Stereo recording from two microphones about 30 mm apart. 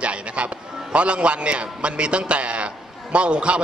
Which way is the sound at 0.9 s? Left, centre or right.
Right.